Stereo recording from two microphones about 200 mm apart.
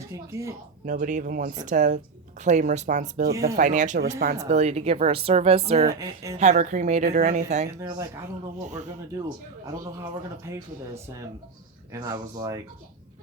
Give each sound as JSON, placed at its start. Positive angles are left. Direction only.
{"t": 0.1, "sound": "speech", "side_deg": -15}
{"t": 0.9, "sound": "a woman's voice", "side_deg": -40}
{"t": 4.4, "sound": "a woman's voice", "side_deg": -35}
{"t": 5.9, "sound": "speech", "side_deg": -15}
{"t": 6.4, "sound": "a woman's voice", "side_deg": -40}
{"t": 7.8, "sound": "speech", "side_deg": -15}
{"t": 9.8, "sound": "speech", "side_deg": -15}